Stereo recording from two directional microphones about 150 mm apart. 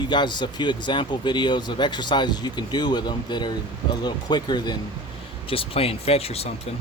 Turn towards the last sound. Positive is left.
turn(degrees=40)  # may be behind; listen again after turning